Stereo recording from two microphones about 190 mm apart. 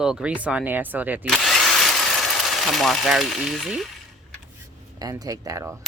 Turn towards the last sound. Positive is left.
turn(degrees=-15)  # may be behind; listen again after turning